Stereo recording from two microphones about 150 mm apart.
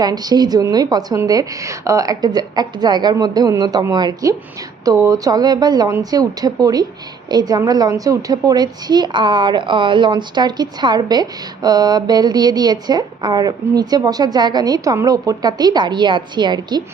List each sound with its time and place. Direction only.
0.0 s a woman's voice: 25° right (ahead or behind)